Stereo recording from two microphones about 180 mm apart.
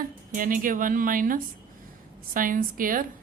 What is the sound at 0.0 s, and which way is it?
A woman's voice, 50° right (ahead or behind).